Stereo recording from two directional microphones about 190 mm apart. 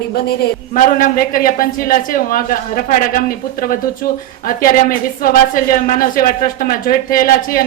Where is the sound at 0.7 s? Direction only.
45° left (ahead or behind).